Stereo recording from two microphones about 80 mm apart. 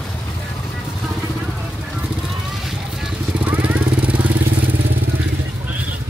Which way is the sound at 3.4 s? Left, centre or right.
Centre.